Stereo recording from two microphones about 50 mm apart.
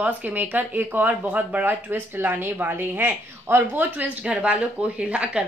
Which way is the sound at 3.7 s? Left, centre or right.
Right.